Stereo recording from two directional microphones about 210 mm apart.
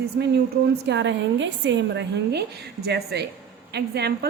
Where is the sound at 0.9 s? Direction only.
60° right (ahead or behind).